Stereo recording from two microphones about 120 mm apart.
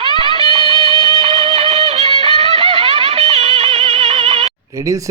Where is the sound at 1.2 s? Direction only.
60° right (ahead or behind).